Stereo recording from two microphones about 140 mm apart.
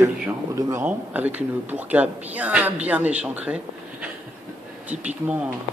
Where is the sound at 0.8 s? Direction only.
10° right (ahead or behind).